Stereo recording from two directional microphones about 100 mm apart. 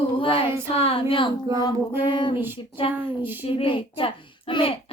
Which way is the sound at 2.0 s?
55° left (ahead or behind).